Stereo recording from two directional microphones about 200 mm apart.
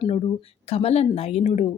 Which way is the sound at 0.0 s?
25° left (ahead or behind).